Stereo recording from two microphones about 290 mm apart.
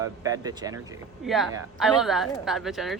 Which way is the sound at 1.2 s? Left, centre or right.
Centre.